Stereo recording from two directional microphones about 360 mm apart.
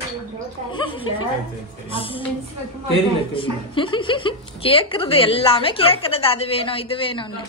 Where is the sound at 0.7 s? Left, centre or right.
Centre.